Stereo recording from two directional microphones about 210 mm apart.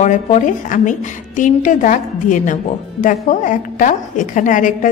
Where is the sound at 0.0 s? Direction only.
35° left (ahead or behind).